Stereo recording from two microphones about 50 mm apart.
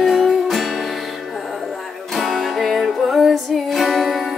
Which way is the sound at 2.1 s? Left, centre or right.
Centre.